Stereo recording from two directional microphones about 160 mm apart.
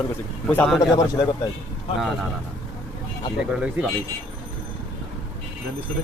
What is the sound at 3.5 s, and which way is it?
Speech, 5° right (ahead or behind).